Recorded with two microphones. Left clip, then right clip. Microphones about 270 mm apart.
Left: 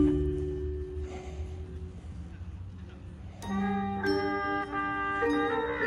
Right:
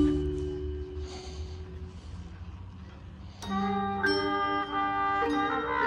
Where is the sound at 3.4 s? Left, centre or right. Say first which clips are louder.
Right 3 dB; right.